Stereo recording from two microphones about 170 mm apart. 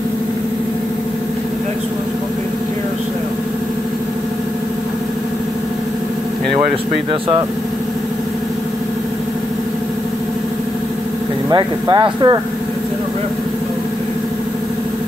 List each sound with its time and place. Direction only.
7.1 s speech: 30° right (ahead or behind)
11.5 s speech: 25° right (ahead or behind)